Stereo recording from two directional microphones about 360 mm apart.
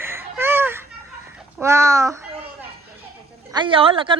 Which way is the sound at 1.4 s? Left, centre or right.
Centre.